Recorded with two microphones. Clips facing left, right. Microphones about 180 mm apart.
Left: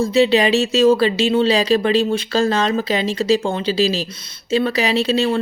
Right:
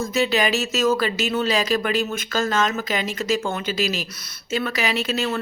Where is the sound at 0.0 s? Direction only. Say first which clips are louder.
Left 7 dB; 30° left (ahead or behind).